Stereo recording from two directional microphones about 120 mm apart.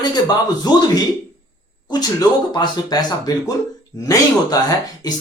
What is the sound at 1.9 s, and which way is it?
Speech, 35° left (ahead or behind).